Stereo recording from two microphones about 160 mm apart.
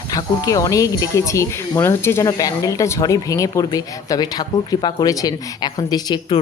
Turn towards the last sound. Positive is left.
turn(degrees=25)  # may be behind; listen again after turning